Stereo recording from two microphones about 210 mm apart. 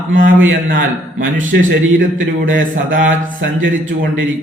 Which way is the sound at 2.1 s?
65° right (ahead or behind).